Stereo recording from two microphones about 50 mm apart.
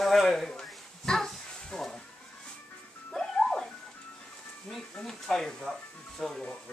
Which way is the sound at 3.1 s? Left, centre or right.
Centre.